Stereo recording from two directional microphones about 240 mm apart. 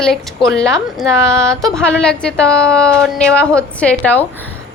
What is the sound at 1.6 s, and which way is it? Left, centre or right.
A woman's voice, centre.